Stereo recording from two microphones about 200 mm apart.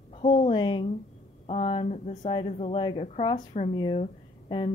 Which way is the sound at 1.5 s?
30° left (ahead or behind).